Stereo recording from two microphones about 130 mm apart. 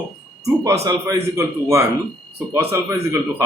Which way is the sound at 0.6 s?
25° right (ahead or behind).